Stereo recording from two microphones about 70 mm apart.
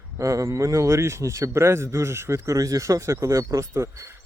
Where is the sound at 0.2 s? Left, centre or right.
Right.